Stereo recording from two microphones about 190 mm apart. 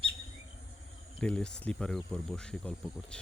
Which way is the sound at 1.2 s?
5° left (ahead or behind).